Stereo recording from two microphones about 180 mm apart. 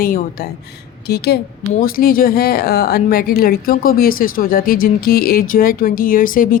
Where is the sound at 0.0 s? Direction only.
55° left (ahead or behind).